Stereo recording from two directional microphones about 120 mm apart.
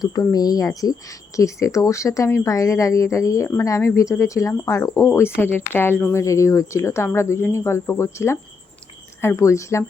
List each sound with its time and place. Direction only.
0.0 s speech: 30° left (ahead or behind)